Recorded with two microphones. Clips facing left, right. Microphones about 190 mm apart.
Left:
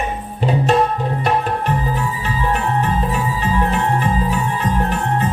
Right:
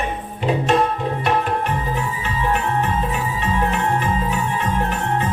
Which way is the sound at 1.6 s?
35° left (ahead or behind).